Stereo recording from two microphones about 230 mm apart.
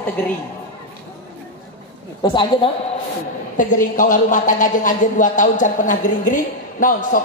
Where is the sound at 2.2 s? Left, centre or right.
Left.